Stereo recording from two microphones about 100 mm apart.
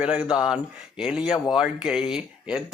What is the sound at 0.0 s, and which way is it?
Speech, 10° right (ahead or behind).